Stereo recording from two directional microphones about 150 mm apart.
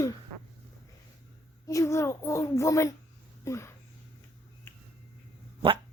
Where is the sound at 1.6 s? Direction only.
20° left (ahead or behind).